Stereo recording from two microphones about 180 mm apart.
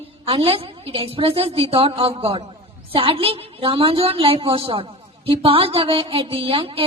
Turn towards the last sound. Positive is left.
turn(degrees=-30)  # may be behind; listen again after turning